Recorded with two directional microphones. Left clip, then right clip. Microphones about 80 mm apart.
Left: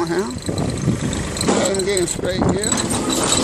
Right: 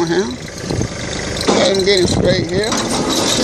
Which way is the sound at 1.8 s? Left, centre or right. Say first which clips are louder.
Right 7 dB; right.